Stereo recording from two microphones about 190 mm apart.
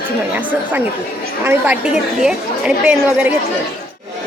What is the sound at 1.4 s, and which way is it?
Speech, 10° right (ahead or behind).